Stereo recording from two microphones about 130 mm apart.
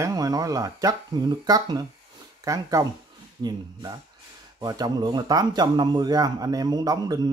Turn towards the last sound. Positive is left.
turn(degrees=-30)  # may be behind; listen again after turning